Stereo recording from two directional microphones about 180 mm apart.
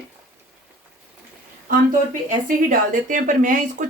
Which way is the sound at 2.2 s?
45° right (ahead or behind).